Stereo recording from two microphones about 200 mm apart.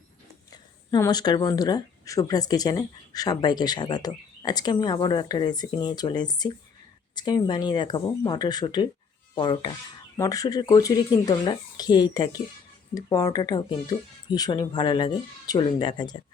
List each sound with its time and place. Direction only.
0.5 s speech: 20° left (ahead or behind)